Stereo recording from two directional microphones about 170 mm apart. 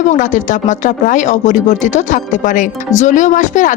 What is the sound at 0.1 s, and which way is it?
Speech, 45° left (ahead or behind).